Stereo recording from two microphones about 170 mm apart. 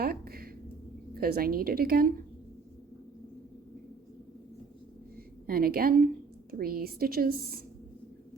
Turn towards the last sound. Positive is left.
turn(degrees=-65)  # may be behind; listen again after turning